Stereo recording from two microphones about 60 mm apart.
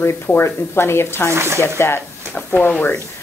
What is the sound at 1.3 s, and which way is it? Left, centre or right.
Speech, right.